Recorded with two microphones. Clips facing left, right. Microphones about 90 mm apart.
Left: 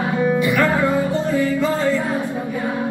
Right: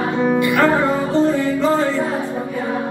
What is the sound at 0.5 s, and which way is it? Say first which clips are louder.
Music: right 2 dB; 30° right (ahead or behind).